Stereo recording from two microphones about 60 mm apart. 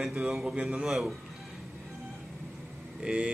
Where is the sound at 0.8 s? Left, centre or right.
Centre.